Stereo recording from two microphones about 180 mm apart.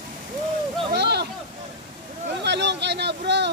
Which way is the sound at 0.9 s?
65° right (ahead or behind).